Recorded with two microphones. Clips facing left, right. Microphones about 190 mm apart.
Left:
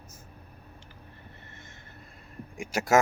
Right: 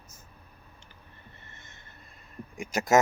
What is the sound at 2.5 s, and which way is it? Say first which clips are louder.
Speech: even; 10° left (ahead or behind).